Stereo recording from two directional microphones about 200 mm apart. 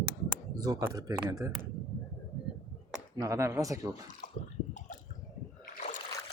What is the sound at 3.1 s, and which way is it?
Speech, 15° right (ahead or behind).